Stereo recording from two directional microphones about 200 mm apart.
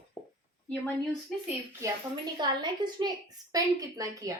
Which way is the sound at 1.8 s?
20° right (ahead or behind).